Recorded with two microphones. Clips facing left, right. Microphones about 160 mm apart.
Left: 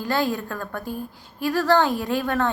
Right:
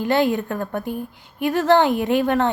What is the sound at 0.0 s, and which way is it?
A woman's voice, 20° right (ahead or behind).